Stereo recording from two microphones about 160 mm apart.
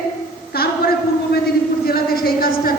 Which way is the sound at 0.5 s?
75° left (ahead or behind).